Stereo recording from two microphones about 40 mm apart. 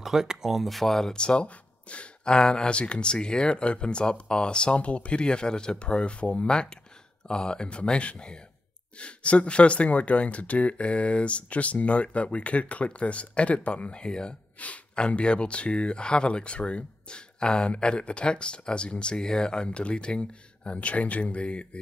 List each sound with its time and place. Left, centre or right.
0.0 s speech: centre
0.7 s speech: centre
1.1 s speech: left
14.6 s speech: left
15.0 s speech: left